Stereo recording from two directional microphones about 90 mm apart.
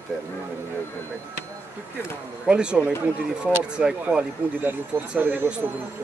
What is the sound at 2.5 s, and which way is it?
Speech, 10° right (ahead or behind).